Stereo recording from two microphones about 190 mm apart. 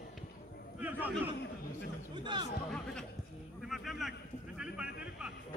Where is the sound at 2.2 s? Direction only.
25° right (ahead or behind).